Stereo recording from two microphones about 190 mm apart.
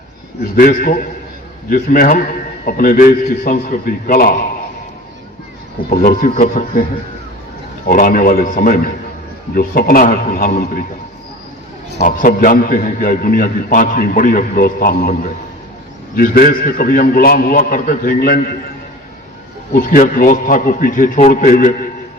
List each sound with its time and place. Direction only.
0.5 s a man's voice: 45° left (ahead or behind)
5.9 s a man's voice: 45° left (ahead or behind)
7.9 s a man's voice: 45° left (ahead or behind)
12.0 s a man's voice: 45° left (ahead or behind)
19.7 s a man's voice: 45° left (ahead or behind)